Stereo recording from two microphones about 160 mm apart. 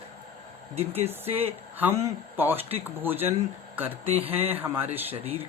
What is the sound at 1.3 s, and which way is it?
Speech, 40° right (ahead or behind).